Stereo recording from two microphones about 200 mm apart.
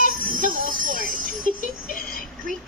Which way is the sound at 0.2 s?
45° right (ahead or behind).